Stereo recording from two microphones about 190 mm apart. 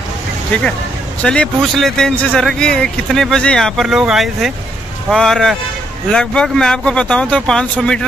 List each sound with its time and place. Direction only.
1.2 s speech: 5° left (ahead or behind)